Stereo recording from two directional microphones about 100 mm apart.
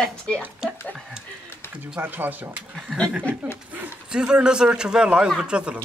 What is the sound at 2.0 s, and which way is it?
Speech, 20° right (ahead or behind).